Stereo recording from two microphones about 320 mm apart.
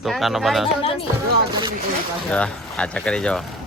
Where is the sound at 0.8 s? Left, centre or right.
Centre.